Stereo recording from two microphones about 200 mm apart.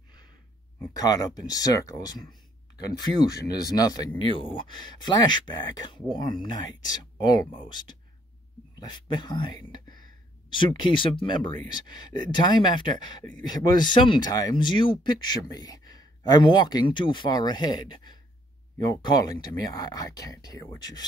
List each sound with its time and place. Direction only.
0.9 s speech: 20° left (ahead or behind)